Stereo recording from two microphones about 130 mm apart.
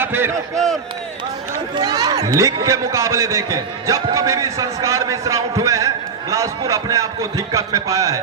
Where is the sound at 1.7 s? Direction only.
30° right (ahead or behind).